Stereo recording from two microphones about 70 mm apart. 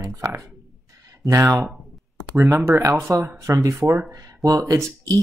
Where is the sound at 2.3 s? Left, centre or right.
Right.